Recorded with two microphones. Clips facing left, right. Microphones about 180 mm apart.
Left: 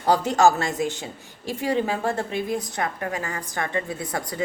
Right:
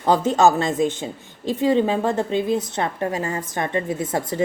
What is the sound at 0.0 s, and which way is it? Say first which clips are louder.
Speech: right 2 dB; 20° right (ahead or behind).